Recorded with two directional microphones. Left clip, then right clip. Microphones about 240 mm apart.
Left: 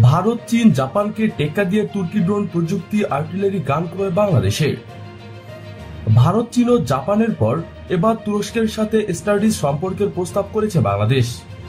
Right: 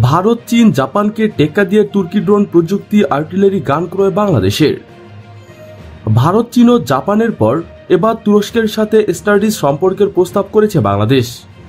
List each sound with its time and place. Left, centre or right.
0.0 s speech: right
6.1 s speech: right